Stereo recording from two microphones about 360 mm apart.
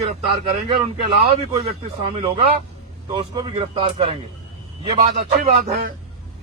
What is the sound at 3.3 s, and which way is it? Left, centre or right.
A man's voice, centre.